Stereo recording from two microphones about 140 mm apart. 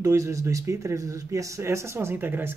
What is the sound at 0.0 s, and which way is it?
Speech, 20° right (ahead or behind).